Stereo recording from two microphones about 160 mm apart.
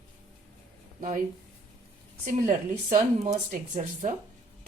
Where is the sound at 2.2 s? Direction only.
50° right (ahead or behind).